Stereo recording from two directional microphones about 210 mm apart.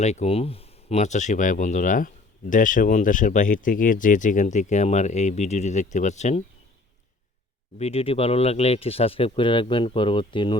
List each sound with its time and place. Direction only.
0.0 s speech: 30° left (ahead or behind)
7.8 s speech: 30° left (ahead or behind)